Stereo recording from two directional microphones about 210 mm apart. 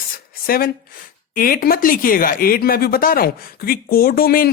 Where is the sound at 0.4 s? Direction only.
45° left (ahead or behind).